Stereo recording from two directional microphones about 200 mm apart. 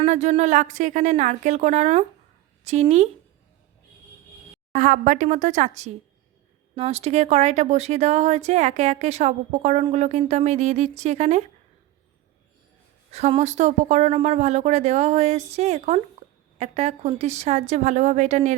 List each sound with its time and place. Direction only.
0.0 s speech: 35° right (ahead or behind)
4.7 s speech: 40° right (ahead or behind)
13.1 s speech: 30° right (ahead or behind)